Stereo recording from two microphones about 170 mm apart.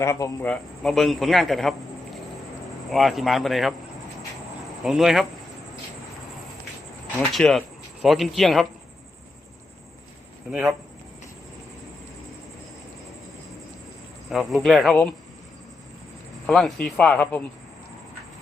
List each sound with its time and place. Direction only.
0.0 s a man's voice: 15° left (ahead or behind); by 1.7 s centre (ahead or behind)
2.9 s a man's voice: centre (ahead or behind)
4.8 s a man's voice: centre (ahead or behind)
7.2 s a man's voice: 5° left (ahead or behind)
10.5 s a man's voice: centre (ahead or behind)
14.3 s a man's voice: centre (ahead or behind)
16.5 s a man's voice: 5° left (ahead or behind)